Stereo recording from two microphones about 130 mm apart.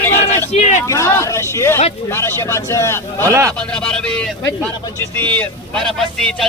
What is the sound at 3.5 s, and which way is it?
Speech, 10° left (ahead or behind).